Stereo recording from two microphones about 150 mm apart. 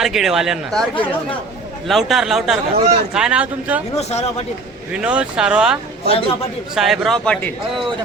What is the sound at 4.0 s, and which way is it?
Speech, 45° left (ahead or behind).